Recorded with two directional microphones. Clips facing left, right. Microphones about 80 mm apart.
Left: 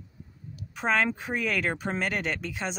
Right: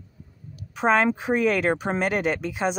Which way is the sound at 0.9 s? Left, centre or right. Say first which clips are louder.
Right 6 dB; right.